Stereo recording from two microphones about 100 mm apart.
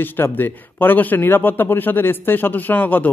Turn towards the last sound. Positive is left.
turn(degrees=20)  # may be behind; listen again after turning